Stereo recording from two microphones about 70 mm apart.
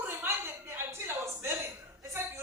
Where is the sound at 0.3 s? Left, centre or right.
Right.